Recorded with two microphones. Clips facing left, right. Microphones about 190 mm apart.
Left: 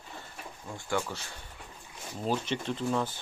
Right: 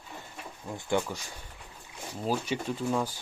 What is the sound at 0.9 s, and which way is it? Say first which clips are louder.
Speech: right 3 dB; 15° right (ahead or behind).